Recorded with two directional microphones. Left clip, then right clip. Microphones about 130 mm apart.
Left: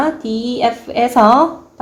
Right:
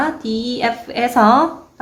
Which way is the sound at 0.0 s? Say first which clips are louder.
Left 2 dB; 25° left (ahead or behind).